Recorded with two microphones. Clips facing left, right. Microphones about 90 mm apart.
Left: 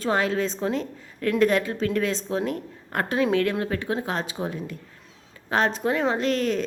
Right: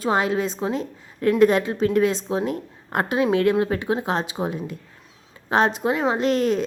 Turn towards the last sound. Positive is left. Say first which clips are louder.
# right 3 dB
turn(degrees=-20)  # may be behind; listen again after turning